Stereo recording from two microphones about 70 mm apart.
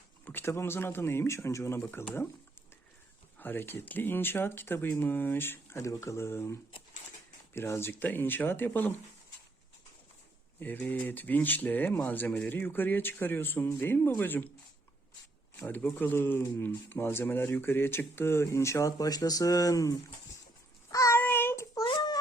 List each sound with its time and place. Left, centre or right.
0.3 s speech: left
3.3 s speech: left
10.6 s speech: left
15.5 s speech: left
20.9 s child singing: left
21.2 s child singing: left
21.8 s child singing: left